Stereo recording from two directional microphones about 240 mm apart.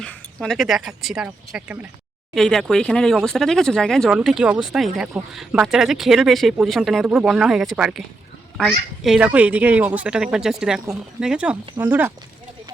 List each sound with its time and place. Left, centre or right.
0.0 s speech: centre
9.0 s speech: centre